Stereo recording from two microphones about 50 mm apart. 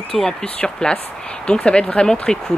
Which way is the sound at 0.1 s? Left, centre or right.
Centre.